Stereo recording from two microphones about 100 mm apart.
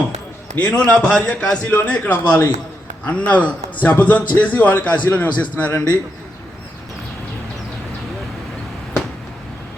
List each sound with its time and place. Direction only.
0.5 s a man's voice: 15° left (ahead or behind)